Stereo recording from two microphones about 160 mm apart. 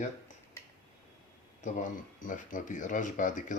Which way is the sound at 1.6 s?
55° left (ahead or behind).